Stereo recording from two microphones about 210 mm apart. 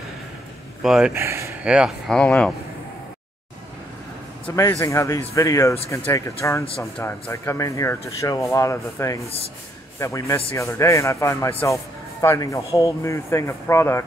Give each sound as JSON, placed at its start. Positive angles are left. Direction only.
{"t": 0.8, "sound": "speech", "side_deg": -5}
{"t": 4.5, "sound": "a man's voice", "side_deg": 10}